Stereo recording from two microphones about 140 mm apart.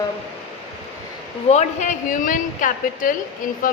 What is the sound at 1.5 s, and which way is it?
A woman's voice, 55° left (ahead or behind).